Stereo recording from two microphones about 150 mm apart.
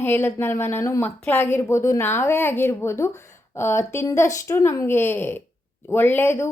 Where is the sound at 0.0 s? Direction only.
15° left (ahead or behind).